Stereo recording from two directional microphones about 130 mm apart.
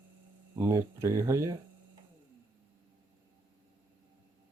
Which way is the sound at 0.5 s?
20° right (ahead or behind).